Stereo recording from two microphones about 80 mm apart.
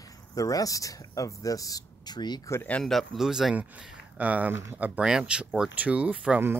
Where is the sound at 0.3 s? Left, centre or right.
Left.